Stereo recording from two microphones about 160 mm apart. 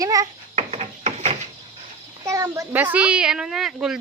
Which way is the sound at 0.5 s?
40° right (ahead or behind).